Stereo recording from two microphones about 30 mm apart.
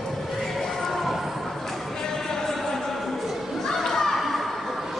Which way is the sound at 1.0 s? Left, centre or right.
Centre.